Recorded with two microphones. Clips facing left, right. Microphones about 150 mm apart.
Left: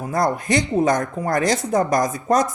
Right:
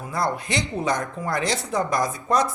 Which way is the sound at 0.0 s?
45° left (ahead or behind).